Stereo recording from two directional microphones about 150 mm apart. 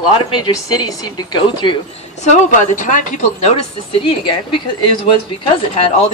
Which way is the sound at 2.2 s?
55° left (ahead or behind).